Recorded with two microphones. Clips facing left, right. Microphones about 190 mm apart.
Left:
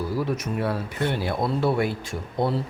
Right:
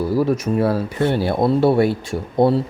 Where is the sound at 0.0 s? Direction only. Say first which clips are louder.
Right 8 dB; 70° right (ahead or behind).